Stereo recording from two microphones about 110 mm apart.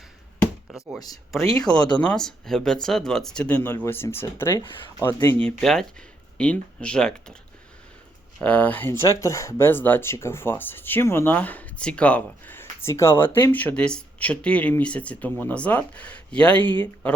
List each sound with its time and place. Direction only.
0.9 s speech: 35° left (ahead or behind)
1.4 s speech: 5° left (ahead or behind); by 5.4 s 25° left (ahead or behind)
5.4 s speech: 5° left (ahead or behind)
8.4 s speech: 10° left (ahead or behind)